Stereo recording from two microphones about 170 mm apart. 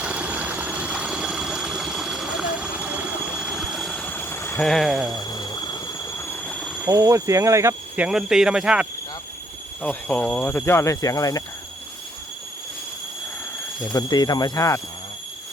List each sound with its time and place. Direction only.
0.0 s a sound: 5° right (ahead or behind); by 4.7 s 15° left (ahead or behind)
4.7 s speech: centre (ahead or behind)
5.1 s a sound: 25° left (ahead or behind); by 6.8 s centre (ahead or behind)
6.8 s speech: 15° right (ahead or behind)
9.8 s speech: 10° left (ahead or behind)
13.9 s speech: 25° left (ahead or behind)